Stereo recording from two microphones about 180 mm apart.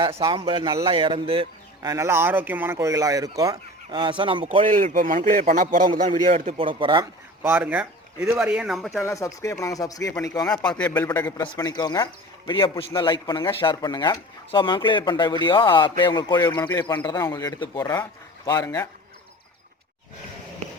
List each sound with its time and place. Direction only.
0.0 s a man's voice: 25° right (ahead or behind)
1.9 s a man's voice: 15° right (ahead or behind)
4.4 s a man's voice: 45° right (ahead or behind)
6.7 s a man's voice: 30° right (ahead or behind)
7.4 s speech: 10° right (ahead or behind)
9.0 s speech: 15° left (ahead or behind)
10.5 s speech: 5° left (ahead or behind)